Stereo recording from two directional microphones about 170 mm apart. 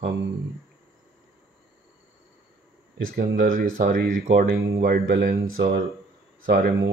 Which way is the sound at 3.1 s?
55° right (ahead or behind).